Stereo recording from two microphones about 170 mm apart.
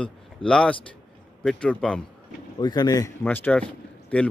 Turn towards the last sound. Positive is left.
turn(degrees=5)  # may be behind; listen again after turning